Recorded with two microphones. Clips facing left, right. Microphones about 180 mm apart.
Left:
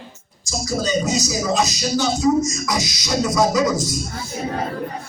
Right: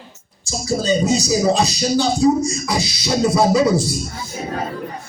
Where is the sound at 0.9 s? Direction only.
35° right (ahead or behind).